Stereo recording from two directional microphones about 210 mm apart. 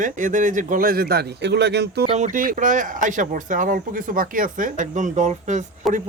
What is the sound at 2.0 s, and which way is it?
A man's voice, 30° right (ahead or behind).